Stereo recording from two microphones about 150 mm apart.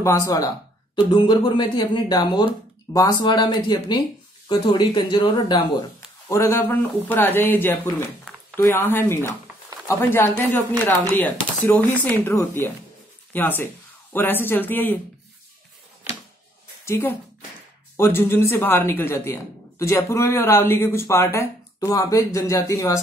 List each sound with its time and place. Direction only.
0.0 s speech: 20° left (ahead or behind)
0.9 s speech: 30° left (ahead or behind)
6.2 s speech: 20° left (ahead or behind)
16.8 s a woman's voice: 15° left (ahead or behind)